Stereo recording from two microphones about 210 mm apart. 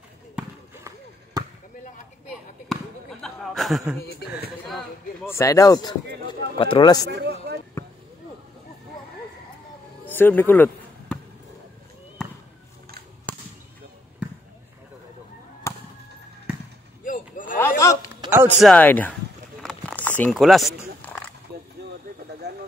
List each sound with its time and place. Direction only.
0.4 s basketball bounce: 15° right (ahead or behind)
2.7 s basketball bounce: centre (ahead or behind)
4.2 s speech: 50° left (ahead or behind)
4.6 s speech: centre (ahead or behind)
5.3 s speech: 15° left (ahead or behind)
7.1 s speech: 50° right (ahead or behind)
10.0 s speech: 10° left (ahead or behind)
15.7 s fireworks: 15° left (ahead or behind)
17.0 s a sound: 40° left (ahead or behind)
17.6 s hiccup: 15° left (ahead or behind)
18.3 s a sound: 10° right (ahead or behind)
18.7 s speech: 10° left (ahead or behind)
19.6 s a sound: 5° left (ahead or behind)
22.4 s a sound: 50° right (ahead or behind)